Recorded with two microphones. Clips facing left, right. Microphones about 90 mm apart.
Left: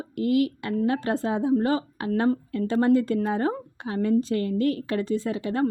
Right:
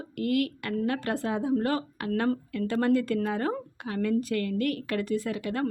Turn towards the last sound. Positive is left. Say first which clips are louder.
# left 4 dB
turn(degrees=25)  # may be behind; listen again after turning